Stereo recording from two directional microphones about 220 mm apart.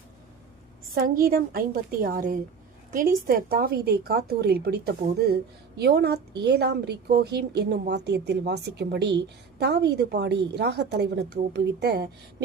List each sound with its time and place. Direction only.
0.9 s a woman's voice: 40° right (ahead or behind)